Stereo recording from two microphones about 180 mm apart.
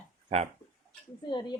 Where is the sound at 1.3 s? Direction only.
25° left (ahead or behind).